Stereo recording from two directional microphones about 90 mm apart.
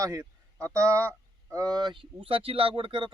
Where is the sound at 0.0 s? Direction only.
35° right (ahead or behind).